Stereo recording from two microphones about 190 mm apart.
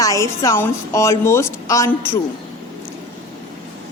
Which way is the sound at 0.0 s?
15° left (ahead or behind).